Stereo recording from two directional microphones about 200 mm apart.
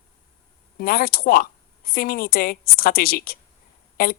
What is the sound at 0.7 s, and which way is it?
Speech, 45° left (ahead or behind).